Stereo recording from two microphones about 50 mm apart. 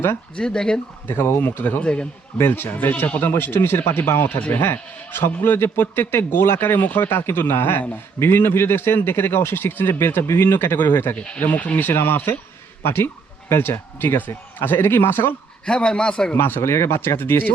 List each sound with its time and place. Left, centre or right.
0.3 s speech: centre
1.0 s a man's voice: left
1.8 s speech: left
2.4 s a man's voice: left
4.4 s speech: left
4.6 s a man's voice: left
11.8 s a man's voice: left
15.6 s speech: centre
16.3 s a man's voice: left
17.2 s a man's voice: left